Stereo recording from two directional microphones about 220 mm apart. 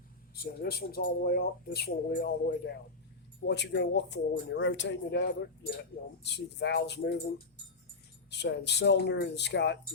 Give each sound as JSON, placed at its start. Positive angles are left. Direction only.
{"t": 0.6, "sound": "speech", "side_deg": 45}